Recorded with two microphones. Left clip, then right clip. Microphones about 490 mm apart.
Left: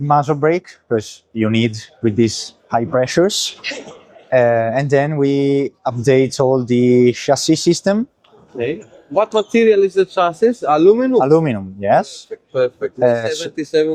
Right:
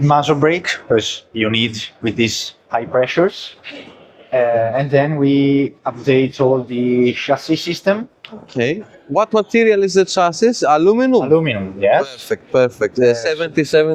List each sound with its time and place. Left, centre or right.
0.1 s speech: left
4.3 s speech: left
9.1 s a man's voice: right
11.3 s speech: left
12.5 s a man's voice: right